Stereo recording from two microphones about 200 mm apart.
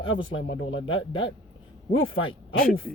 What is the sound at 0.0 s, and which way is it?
Speech, 25° left (ahead or behind).